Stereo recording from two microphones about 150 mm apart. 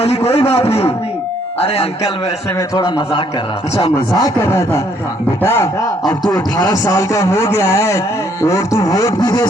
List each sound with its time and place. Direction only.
0.3 s a man's voice: 40° left (ahead or behind)
2.6 s speech: 25° left (ahead or behind)
4.2 s speech: 20° left (ahead or behind)
6.2 s speech: 25° left (ahead or behind)